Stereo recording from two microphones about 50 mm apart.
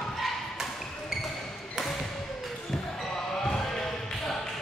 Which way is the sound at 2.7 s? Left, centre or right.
Centre.